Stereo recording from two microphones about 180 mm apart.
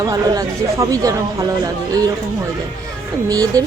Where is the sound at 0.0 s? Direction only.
20° right (ahead or behind).